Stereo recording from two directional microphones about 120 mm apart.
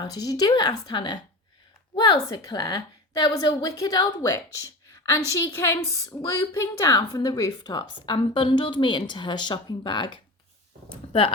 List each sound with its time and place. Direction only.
0.0 s a woman's voice: 30° left (ahead or behind)
2.3 s a woman's voice: 35° left (ahead or behind); by 11.3 s 50° left (ahead or behind)